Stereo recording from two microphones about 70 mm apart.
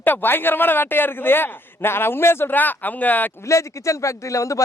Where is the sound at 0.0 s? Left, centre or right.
Left.